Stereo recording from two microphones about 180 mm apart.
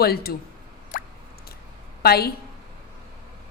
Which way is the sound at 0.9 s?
45° left (ahead or behind).